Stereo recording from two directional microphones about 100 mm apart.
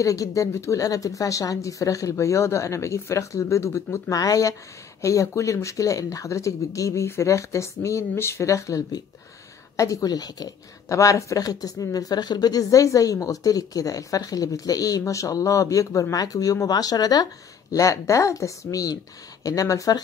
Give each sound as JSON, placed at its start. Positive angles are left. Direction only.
{"t": 0.0, "sound": "speech", "side_deg": 35}